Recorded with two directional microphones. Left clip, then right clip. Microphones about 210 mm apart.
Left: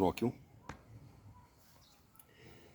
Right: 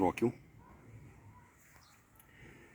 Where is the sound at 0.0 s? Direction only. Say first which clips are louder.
Right 1 dB; 45° left (ahead or behind).